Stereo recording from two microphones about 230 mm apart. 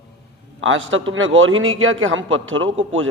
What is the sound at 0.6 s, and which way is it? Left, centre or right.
A man's voice, right.